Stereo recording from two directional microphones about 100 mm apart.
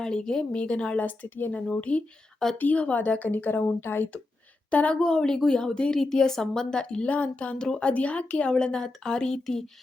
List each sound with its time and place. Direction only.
0.0 s a woman's voice: 5° left (ahead or behind)